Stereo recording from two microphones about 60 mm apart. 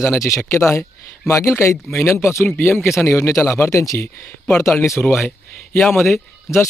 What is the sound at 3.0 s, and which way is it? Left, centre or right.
Speech, left.